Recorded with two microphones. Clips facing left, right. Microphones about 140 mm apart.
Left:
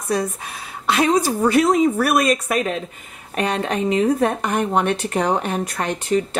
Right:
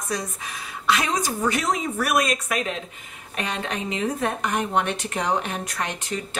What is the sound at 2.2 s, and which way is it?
A woman's voice, 45° left (ahead or behind).